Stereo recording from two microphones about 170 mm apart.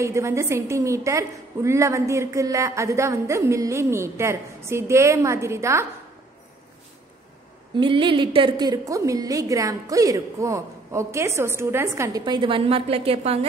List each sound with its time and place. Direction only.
0.0 s a woman's voice: 15° right (ahead or behind)
7.7 s a woman's voice: 30° right (ahead or behind)
12.3 s a woman's voice: 30° right (ahead or behind)